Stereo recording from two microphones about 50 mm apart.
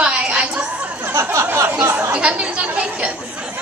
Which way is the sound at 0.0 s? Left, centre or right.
Right.